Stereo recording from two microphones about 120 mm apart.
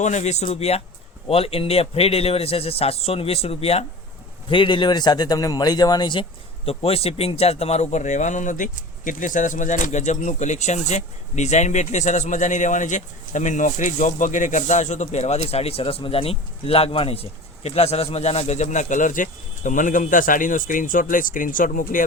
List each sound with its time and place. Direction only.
0.0 s speech: 80° left
0.4 s a man's voice: 60° left (ahead or behind)
4.4 s a man's voice: 45° left (ahead or behind)
6.7 s a man's voice: 55° left (ahead or behind); by 22.0 s 90° left